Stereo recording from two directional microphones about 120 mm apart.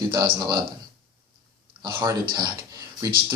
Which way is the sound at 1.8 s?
35° right (ahead or behind).